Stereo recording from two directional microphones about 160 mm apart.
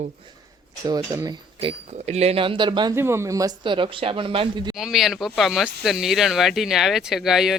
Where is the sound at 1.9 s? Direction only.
45° right (ahead or behind).